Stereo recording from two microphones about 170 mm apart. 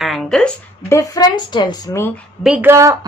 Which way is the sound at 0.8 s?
20° left (ahead or behind).